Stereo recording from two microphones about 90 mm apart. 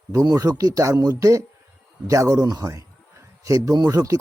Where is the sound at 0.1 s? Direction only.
40° right (ahead or behind).